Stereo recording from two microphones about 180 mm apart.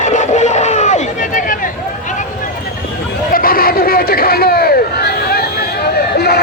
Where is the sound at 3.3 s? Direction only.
55° left (ahead or behind).